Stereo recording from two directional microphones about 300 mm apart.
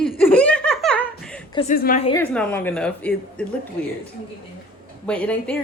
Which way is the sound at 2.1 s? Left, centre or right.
Centre.